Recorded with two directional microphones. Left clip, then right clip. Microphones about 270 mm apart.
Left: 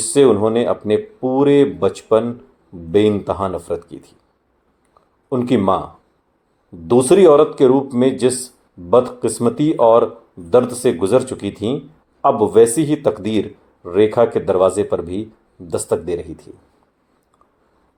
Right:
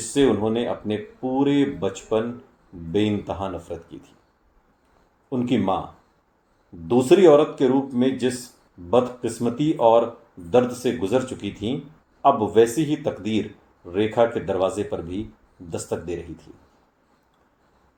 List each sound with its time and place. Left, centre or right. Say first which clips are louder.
0.1 s a man's voice: left 8 dB; left
5.3 s a man's voice: left 7 dB; left
6.8 s a man's voice: left 5 dB; left